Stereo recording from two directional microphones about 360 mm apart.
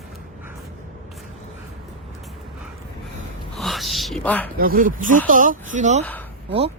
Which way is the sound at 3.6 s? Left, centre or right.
Centre.